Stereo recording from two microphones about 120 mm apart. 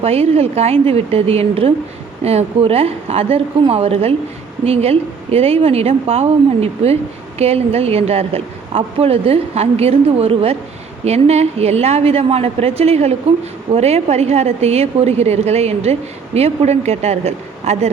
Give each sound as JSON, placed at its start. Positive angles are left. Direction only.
{"t": 0.0, "sound": "a woman's voice", "side_deg": -60}